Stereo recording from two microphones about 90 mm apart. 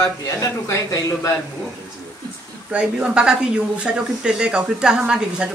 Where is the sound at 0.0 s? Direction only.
35° left (ahead or behind).